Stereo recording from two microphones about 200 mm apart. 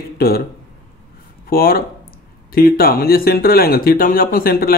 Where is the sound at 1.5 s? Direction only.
45° left (ahead or behind).